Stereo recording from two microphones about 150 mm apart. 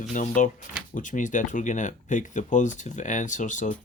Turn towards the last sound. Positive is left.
turn(degrees=55)  # may be behind; listen again after turning